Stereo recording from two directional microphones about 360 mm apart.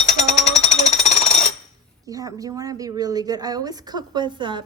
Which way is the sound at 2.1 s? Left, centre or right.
Centre.